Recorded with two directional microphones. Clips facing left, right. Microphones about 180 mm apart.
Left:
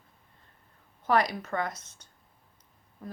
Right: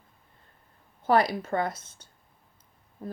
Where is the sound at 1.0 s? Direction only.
30° right (ahead or behind).